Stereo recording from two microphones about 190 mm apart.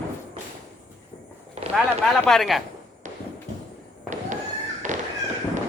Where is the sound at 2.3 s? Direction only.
Centre (ahead or behind).